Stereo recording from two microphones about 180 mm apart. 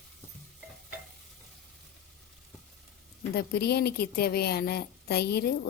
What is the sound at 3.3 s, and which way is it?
A woman's voice, 65° left (ahead or behind).